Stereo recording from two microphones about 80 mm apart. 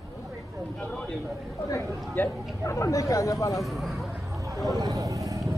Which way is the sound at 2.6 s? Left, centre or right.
Left.